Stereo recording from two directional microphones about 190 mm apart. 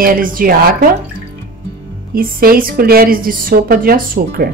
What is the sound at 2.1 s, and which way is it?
A woman's voice, 50° right (ahead or behind).